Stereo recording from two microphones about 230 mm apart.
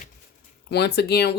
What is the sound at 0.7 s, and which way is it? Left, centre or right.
Speech, left.